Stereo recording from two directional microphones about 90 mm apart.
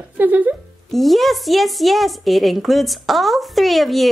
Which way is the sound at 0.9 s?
Centre (ahead or behind).